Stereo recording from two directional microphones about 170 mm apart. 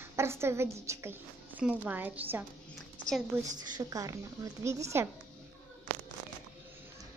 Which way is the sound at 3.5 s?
25° right (ahead or behind).